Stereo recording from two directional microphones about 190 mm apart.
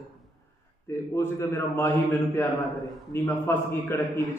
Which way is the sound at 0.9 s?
15° left (ahead or behind).